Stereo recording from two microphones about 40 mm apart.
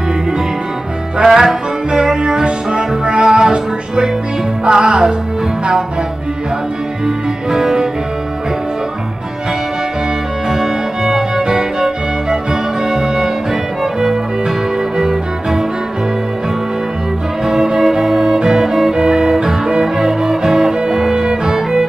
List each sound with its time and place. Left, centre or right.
1.1 s music: centre
7.1 s music: centre
10.5 s music: centre
15.0 s music: centre
17.5 s music: centre